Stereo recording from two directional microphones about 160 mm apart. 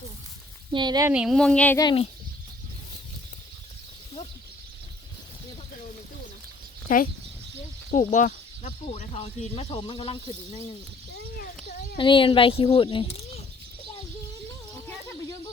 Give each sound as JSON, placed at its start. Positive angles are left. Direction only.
{"t": 0.7, "sound": "speech", "side_deg": -30}
{"t": 1.1, "sound": "speech", "side_deg": -5}
{"t": 1.8, "sound": "speech", "side_deg": 30}
{"t": 6.8, "sound": "speech", "side_deg": 60}
{"t": 11.9, "sound": "speech", "side_deg": 30}